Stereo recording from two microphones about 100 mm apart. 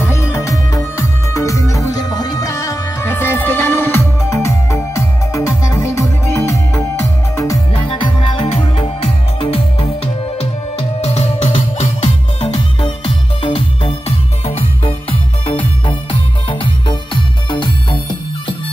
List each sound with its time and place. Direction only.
0.0 s music: 25° left (ahead or behind)
3.1 s music: 20° left (ahead or behind)
7.9 s music: 60° left (ahead or behind); by 9.8 s 75° left (ahead or behind)
10.4 s music: 90° left
12.5 s music: 60° left (ahead or behind); by 15.5 s 80° left
15.9 s music: 55° left (ahead or behind)